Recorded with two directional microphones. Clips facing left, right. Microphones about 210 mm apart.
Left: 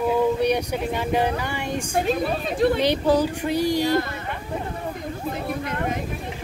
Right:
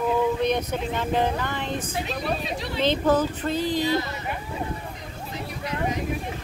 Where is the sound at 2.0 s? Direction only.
50° left (ahead or behind).